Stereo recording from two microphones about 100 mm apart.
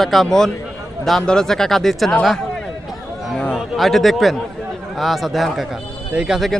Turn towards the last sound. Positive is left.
turn(degrees=-5)  # may be behind; listen again after turning